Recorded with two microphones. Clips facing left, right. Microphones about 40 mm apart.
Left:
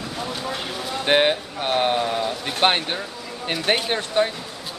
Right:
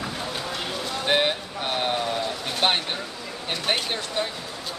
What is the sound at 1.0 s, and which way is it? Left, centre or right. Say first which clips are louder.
Speech: left 5 dB; left.